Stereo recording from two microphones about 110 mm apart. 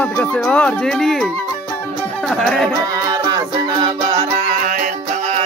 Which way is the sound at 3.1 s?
35° right (ahead or behind).